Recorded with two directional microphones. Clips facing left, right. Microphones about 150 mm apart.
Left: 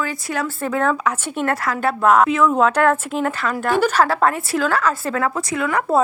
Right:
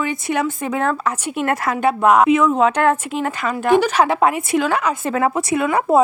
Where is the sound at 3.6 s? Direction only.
15° right (ahead or behind).